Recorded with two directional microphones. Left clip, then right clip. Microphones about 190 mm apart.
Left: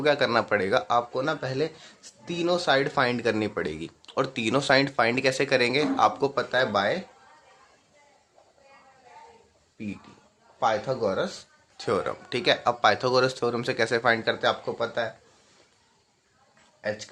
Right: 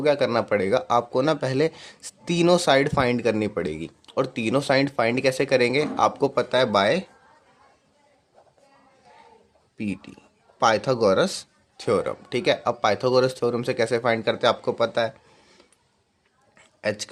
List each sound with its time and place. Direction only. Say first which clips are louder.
0.0 s speech: right 2 dB; 25° right (ahead or behind); by 7.0 s 50° right (ahead or behind)
10.6 s speech: right 5 dB; 55° right (ahead or behind)
11.8 s speech: right 4 dB; 30° right (ahead or behind); by 15.1 s 50° right (ahead or behind)